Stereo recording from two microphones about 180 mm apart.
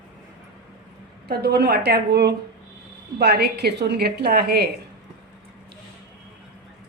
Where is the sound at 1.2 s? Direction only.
60° right (ahead or behind).